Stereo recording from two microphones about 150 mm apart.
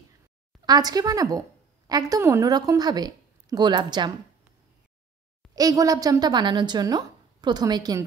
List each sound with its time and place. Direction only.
0.7 s a woman's voice: 25° right (ahead or behind)
5.5 s a woman's voice: 25° right (ahead or behind)